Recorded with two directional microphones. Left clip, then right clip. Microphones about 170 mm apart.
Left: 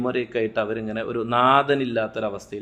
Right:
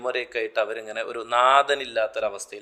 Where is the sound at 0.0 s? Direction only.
30° right (ahead or behind).